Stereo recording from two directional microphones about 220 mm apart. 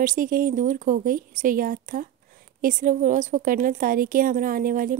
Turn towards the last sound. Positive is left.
turn(degrees=-40)  # may be behind; listen again after turning